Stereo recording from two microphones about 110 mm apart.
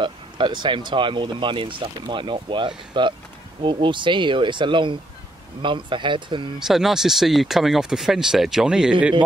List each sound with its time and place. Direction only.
0.0 s speech: 45° right (ahead or behind)
6.7 s speech: 5° right (ahead or behind)